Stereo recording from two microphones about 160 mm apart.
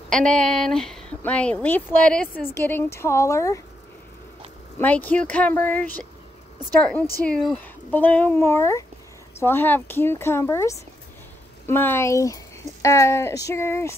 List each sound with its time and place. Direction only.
0.1 s speech: 5° left (ahead or behind)
4.7 s speech: 10° left (ahead or behind)